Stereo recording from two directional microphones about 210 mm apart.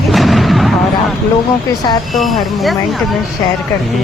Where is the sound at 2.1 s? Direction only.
Centre (ahead or behind).